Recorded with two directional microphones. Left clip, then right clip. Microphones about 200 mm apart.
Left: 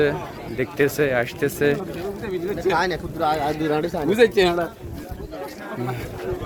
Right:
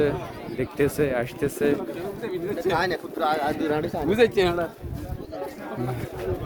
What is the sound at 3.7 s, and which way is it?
Speech, 45° left (ahead or behind).